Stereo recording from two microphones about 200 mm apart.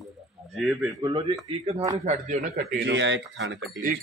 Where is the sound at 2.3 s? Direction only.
35° right (ahead or behind).